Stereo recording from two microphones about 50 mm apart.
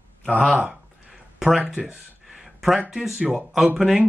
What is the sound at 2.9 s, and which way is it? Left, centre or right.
Speech, centre.